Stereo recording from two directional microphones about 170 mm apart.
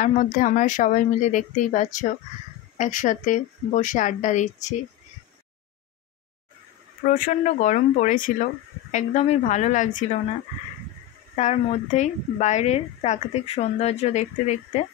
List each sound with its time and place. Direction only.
0.0 s speech: 50° left (ahead or behind)
7.1 s speech: 50° left (ahead or behind)
11.3 s a woman's voice: 45° left (ahead or behind)